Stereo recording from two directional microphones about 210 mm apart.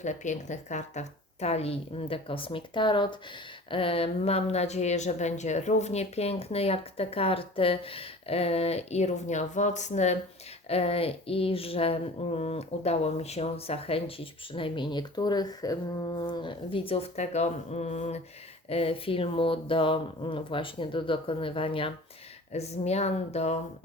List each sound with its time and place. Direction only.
0.0 s speech: 35° left (ahead or behind)